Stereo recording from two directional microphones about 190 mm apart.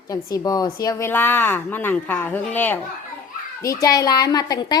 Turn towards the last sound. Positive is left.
turn(degrees=20)  # may be behind; listen again after turning